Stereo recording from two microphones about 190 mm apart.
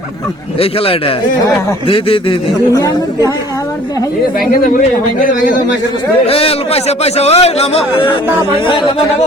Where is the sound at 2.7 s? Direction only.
20° left (ahead or behind).